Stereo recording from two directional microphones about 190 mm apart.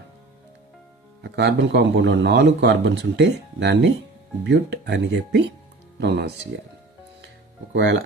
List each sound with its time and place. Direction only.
1.2 s a man's voice: 65° right (ahead or behind)
7.7 s speech: 65° right (ahead or behind)